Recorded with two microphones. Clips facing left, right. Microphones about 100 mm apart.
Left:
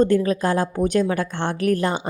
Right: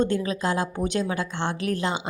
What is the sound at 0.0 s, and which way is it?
A woman's voice, 45° left (ahead or behind).